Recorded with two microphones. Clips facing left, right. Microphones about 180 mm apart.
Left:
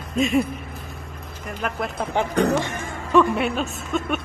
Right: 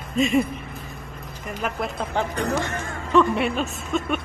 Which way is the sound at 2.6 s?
15° left (ahead or behind).